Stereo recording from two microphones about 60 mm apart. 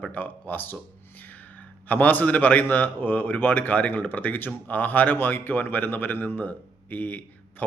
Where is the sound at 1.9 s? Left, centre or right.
Left.